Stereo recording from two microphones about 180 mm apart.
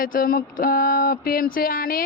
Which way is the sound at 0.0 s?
50° left (ahead or behind).